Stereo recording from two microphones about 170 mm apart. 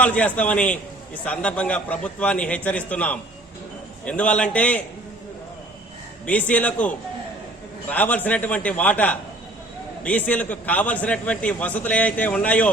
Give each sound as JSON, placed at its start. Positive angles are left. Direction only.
{"t": 0.0, "sound": "a man's voice", "side_deg": 10}
{"t": 6.2, "sound": "a man's voice", "side_deg": 10}